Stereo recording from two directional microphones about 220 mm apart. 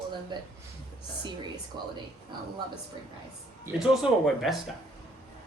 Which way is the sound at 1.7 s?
20° right (ahead or behind).